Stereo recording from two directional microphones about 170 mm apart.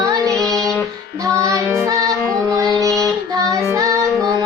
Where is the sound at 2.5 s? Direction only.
20° right (ahead or behind).